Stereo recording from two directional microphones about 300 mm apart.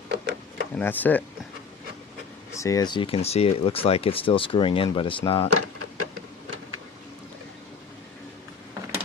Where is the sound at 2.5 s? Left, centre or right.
Centre.